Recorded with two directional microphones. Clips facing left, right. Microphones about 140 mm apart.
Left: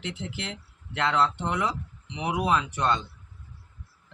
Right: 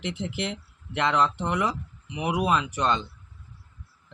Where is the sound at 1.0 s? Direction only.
15° right (ahead or behind).